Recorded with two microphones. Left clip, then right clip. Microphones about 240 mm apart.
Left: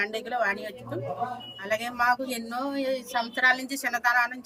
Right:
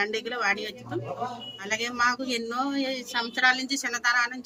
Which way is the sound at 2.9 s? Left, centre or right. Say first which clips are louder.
Left 1 dB; right.